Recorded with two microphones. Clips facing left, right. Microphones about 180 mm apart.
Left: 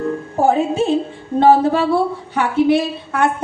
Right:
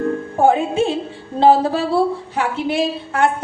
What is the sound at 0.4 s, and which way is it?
Speech, 40° left (ahead or behind).